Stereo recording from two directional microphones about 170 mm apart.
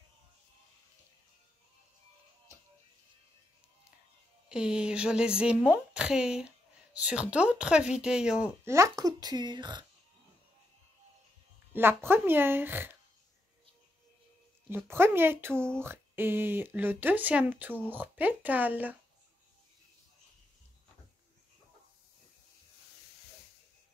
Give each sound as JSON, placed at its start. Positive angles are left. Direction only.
{"t": 4.5, "sound": "a woman's voice", "side_deg": -5}
{"t": 8.6, "sound": "speech", "side_deg": -15}
{"t": 11.7, "sound": "speech", "side_deg": -10}
{"t": 14.9, "sound": "speech", "side_deg": -15}